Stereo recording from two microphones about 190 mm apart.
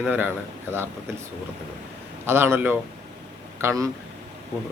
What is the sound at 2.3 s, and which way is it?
A man's voice, 10° right (ahead or behind).